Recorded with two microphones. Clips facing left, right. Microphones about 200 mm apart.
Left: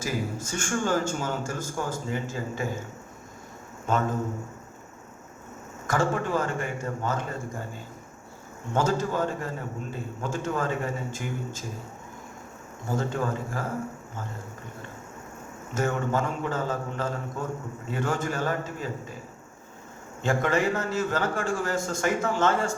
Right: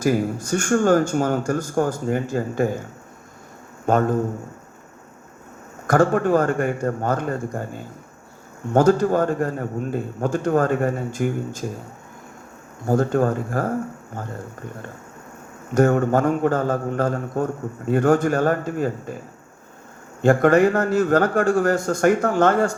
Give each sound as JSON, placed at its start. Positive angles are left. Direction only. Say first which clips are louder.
{"t": 0.5, "sound": "speech", "louder": "right 10 dB", "side_deg": -55}
{"t": 3.8, "sound": "a man's voice", "louder": "right 8 dB", "side_deg": -55}
{"t": 5.9, "sound": "speech", "louder": "right 9 dB", "side_deg": -55}
{"t": 12.9, "sound": "speech", "louder": "right 9 dB", "side_deg": -55}
{"t": 15.8, "sound": "speech", "louder": "right 10 dB", "side_deg": -55}
{"t": 20.2, "sound": "a man's voice", "louder": "right 10 dB", "side_deg": -55}